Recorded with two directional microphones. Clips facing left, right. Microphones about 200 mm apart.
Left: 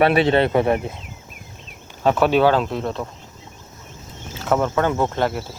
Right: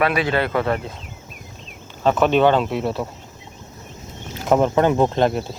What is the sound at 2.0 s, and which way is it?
Speech, 10° left (ahead or behind).